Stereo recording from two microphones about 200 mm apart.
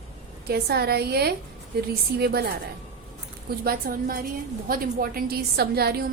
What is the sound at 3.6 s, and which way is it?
A woman's voice, 45° right (ahead or behind).